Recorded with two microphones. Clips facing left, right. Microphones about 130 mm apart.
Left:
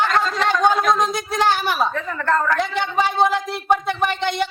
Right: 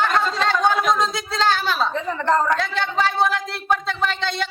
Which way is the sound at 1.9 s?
20° right (ahead or behind).